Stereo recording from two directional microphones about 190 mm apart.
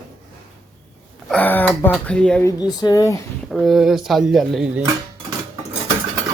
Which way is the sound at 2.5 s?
20° left (ahead or behind).